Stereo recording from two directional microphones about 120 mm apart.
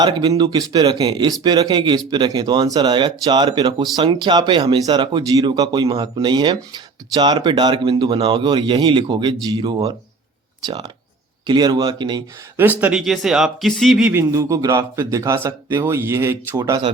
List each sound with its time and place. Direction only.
0.0 s speech: 35° right (ahead or behind)
11.4 s speech: 35° right (ahead or behind)
12.5 s speech: 15° right (ahead or behind)
13.0 s speech: 5° right (ahead or behind)
14.1 s speech: 20° right (ahead or behind)
16.6 s speech: 30° right (ahead or behind)